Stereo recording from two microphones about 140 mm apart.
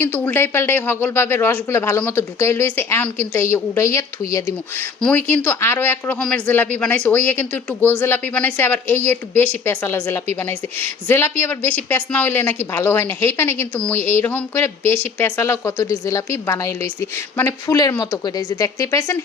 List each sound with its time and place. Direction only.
0.0 s a woman's voice: 15° left (ahead or behind)